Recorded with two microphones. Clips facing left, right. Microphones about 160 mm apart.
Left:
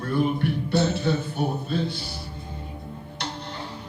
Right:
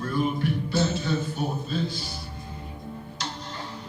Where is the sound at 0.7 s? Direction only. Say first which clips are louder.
Left 5 dB; 60° left (ahead or behind).